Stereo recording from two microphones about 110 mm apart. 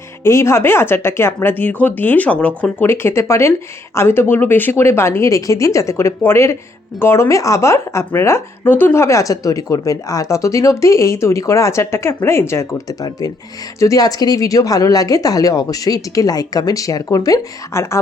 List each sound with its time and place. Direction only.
0.3 s speech: 25° left (ahead or behind)